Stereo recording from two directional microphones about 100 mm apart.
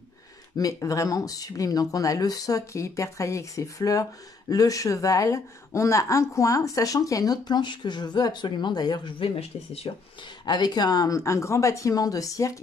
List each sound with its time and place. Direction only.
0.6 s speech: 35° left (ahead or behind)
9.2 s speech: 65° left (ahead or behind)
10.4 s speech: 45° left (ahead or behind)